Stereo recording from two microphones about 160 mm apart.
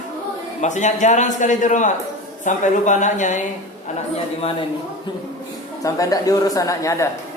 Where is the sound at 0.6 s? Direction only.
50° left (ahead or behind).